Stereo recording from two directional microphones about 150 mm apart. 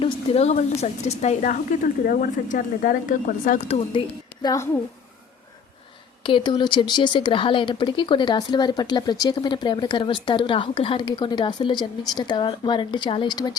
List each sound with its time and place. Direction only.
0.0 s speech: 45° left (ahead or behind); by 3.6 s 60° left (ahead or behind)
3.7 s speech: 40° left (ahead or behind)
4.4 s a woman's voice: 20° left (ahead or behind)
6.2 s speech: 35° left (ahead or behind)